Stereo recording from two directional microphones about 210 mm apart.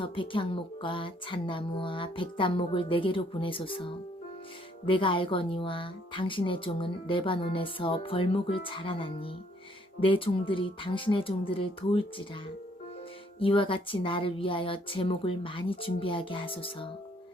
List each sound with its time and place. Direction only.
0.0 s a woman's voice: 25° left (ahead or behind)
13.4 s a woman's voice: 25° left (ahead or behind)